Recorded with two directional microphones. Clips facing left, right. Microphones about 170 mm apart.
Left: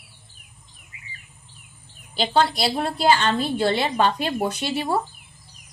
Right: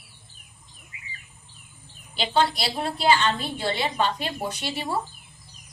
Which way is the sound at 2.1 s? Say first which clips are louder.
Left 3 dB; 40° left (ahead or behind).